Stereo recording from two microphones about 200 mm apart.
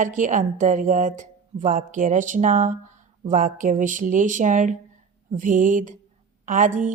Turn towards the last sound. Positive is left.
turn(degrees=-40)  # may be behind; listen again after turning